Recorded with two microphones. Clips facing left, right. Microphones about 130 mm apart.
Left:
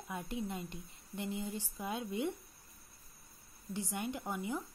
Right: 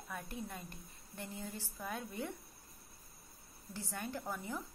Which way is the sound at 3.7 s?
20° left (ahead or behind).